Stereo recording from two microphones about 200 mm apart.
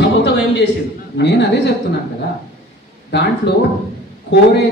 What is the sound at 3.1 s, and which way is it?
Speech, 60° left (ahead or behind).